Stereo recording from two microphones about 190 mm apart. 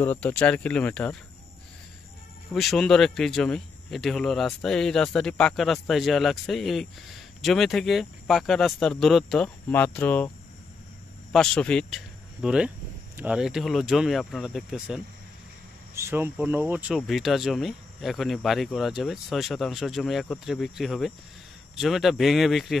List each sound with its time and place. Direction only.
0.0 s speech: 10° left (ahead or behind)
2.5 s speech: centre (ahead or behind)
11.3 s speech: 5° left (ahead or behind)